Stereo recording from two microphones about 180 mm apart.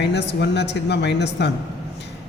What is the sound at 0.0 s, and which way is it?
A man's voice, 70° left (ahead or behind).